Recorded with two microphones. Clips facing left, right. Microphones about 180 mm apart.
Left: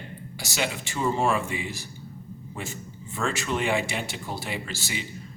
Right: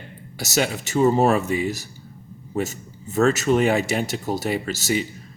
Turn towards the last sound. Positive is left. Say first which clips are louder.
# right 10 dB
turn(degrees=-45)  # may be behind; listen again after turning